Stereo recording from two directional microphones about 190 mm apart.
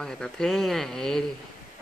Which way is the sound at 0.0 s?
5° left (ahead or behind).